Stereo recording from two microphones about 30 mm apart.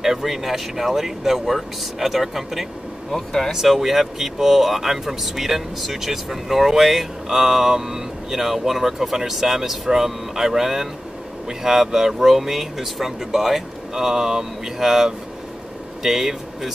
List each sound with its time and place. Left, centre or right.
0.0 s speech: centre
3.1 s speech: centre
3.5 s speech: centre